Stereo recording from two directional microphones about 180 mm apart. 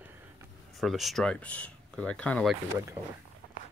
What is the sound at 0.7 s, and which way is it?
Speech, centre (ahead or behind).